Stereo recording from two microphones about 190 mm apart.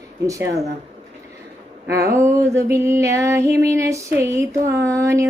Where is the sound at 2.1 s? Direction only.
15° right (ahead or behind).